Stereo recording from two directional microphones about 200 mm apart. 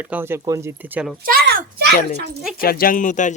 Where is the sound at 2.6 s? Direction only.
45° left (ahead or behind).